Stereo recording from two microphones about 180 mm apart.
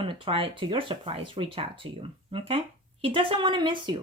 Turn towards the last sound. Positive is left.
turn(degrees=-25)  # may be behind; listen again after turning